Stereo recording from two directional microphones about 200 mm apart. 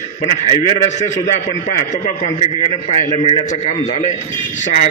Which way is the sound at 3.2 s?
25° left (ahead or behind).